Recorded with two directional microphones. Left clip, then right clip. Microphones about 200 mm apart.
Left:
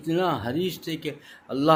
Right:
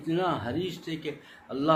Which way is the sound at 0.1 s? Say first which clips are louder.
Left 3 dB; 50° left (ahead or behind).